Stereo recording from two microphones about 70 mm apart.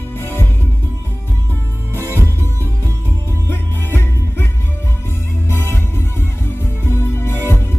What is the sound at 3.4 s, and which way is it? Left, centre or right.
Music, left.